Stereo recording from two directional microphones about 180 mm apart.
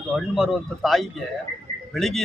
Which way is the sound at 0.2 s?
Centre (ahead or behind).